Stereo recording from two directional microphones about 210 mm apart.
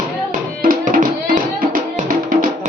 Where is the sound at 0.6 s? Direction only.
40° right (ahead or behind).